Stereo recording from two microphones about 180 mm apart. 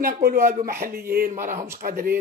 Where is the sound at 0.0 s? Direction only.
55° right (ahead or behind).